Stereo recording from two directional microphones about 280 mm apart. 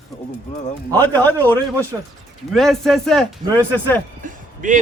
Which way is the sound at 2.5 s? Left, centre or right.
Centre.